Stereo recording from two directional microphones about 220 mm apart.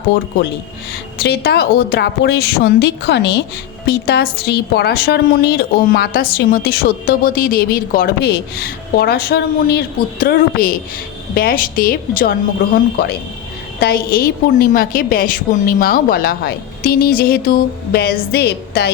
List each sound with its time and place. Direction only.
1.2 s a woman's voice: 45° left (ahead or behind)